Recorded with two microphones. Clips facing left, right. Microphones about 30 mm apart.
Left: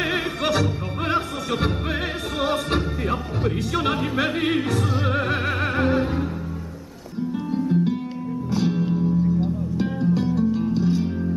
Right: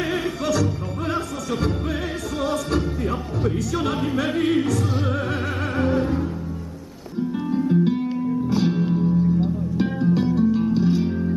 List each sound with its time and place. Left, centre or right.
0.0 s opera: left
2.4 s music: left
3.0 s music: left
5.1 s music: left
5.9 s music: left
7.8 s music: centre